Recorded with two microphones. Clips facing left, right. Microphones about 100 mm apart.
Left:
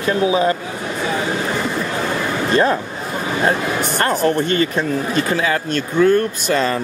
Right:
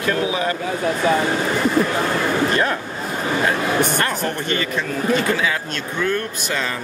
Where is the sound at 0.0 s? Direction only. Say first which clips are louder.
Left 4 dB; 25° left (ahead or behind).